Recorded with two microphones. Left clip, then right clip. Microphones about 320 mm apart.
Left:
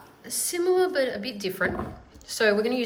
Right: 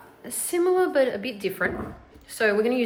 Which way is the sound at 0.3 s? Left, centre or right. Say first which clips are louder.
Right 2 dB; centre.